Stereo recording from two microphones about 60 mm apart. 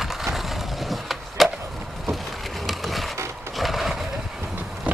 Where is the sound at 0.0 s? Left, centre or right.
Centre.